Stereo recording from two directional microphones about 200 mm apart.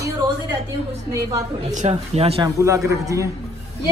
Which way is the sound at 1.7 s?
35° right (ahead or behind).